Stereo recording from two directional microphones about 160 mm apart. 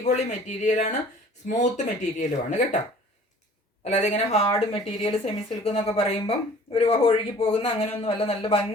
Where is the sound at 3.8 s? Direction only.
45° left (ahead or behind).